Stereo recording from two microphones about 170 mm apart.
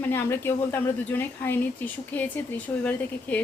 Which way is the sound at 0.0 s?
15° left (ahead or behind).